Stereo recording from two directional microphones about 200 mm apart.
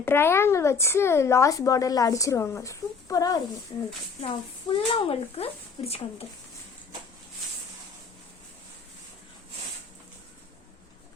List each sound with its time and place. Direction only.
0.0 s speech: 10° left (ahead or behind); by 6.2 s 30° left (ahead or behind)